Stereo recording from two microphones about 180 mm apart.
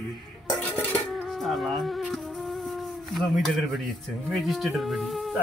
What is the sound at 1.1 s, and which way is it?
Music, centre (ahead or behind).